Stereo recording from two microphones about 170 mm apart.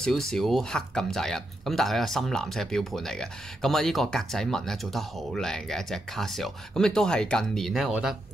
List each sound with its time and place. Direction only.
0.0 s speech: 5° left (ahead or behind)